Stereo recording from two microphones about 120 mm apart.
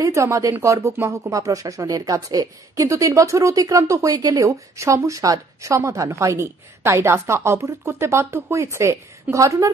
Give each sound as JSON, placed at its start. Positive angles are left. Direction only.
{"t": 0.0, "sound": "speech", "side_deg": -25}